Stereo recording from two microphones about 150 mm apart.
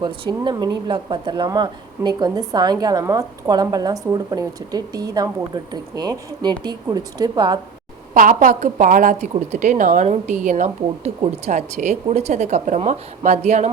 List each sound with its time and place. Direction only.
0.0 s speech: 30° right (ahead or behind)
8.1 s a woman's voice: 65° right (ahead or behind)
9.3 s speech: 50° right (ahead or behind)